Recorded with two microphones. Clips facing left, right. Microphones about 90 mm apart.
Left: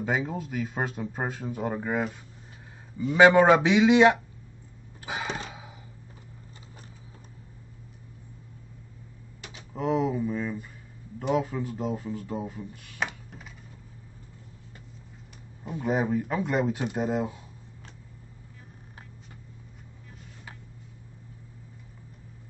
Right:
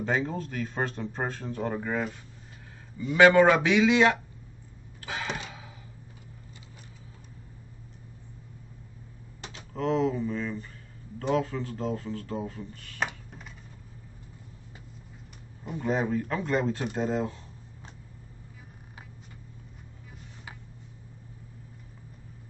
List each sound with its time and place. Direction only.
0.0 s speech: 10° left (ahead or behind)
3.2 s a man's voice: 20° left (ahead or behind)
5.0 s a sound: 15° left (ahead or behind)
9.7 s speech: 10° left (ahead or behind)
13.0 s computer keyboard: centre (ahead or behind)
15.6 s speech: centre (ahead or behind)